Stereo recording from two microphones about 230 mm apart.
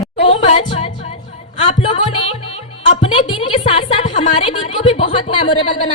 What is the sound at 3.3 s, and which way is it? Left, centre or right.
Music, left.